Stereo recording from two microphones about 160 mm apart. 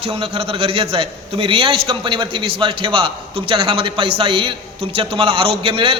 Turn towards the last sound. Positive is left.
turn(degrees=-35)  # may be behind; listen again after turning